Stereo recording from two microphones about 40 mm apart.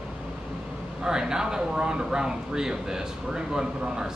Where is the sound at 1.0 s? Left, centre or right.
Centre.